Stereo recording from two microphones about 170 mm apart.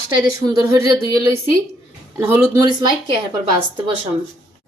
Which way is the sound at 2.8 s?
25° right (ahead or behind).